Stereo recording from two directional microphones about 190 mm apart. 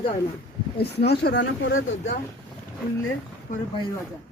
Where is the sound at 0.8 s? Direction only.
60° left (ahead or behind).